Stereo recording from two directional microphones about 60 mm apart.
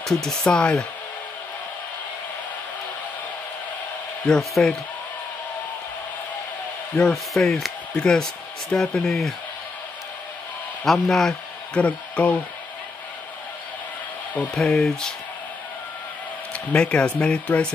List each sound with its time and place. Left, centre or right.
0.0 s speech: centre
4.3 s speech: centre
7.0 s speech: centre
10.9 s speech: centre
11.7 s speech: left
14.5 s speech: centre
16.5 s speech: centre